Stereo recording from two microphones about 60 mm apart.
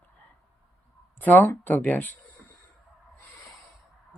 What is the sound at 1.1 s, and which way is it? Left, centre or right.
Speech, left.